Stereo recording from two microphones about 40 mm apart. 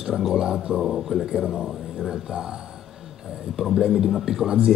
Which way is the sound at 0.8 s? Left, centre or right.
Centre.